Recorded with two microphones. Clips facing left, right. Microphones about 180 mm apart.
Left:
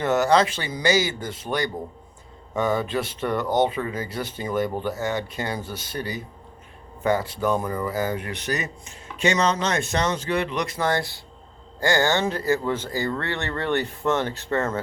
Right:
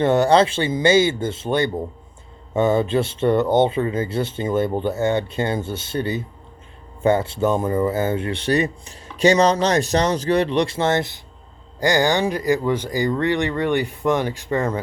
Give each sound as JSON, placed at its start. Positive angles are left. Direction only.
{"t": 0.0, "sound": "speech", "side_deg": -30}